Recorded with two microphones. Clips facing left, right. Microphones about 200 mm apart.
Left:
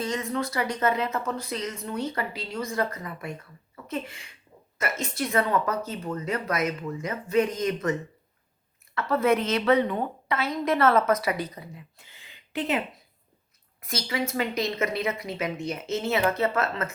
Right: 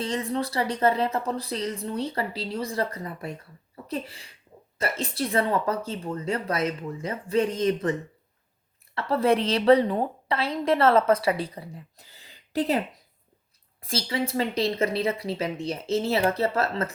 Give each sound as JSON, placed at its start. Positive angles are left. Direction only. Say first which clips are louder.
{"t": 0.0, "sound": "a woman's voice", "louder": "right 1 dB", "side_deg": -30}
{"t": 9.0, "sound": "a woman's voice", "louder": "right 1 dB", "side_deg": -30}
{"t": 13.8, "sound": "a woman's voice", "louder": "right 2 dB", "side_deg": -30}